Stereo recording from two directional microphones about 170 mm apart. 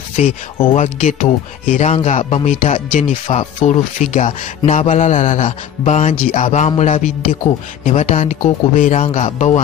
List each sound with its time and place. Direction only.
0.1 s speech: 35° left (ahead or behind)